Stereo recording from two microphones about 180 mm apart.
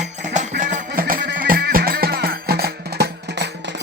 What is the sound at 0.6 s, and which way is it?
Music, 50° right (ahead or behind).